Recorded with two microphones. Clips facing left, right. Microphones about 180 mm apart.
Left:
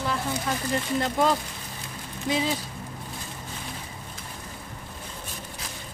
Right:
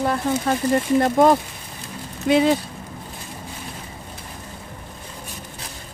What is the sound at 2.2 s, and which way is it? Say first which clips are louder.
Speech: right 10 dB; 65° right (ahead or behind).